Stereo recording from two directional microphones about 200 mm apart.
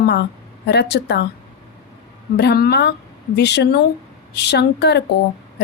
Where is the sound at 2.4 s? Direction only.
55° left (ahead or behind).